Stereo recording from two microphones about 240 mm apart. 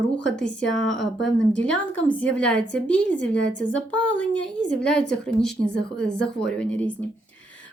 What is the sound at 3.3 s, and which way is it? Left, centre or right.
Speech, left.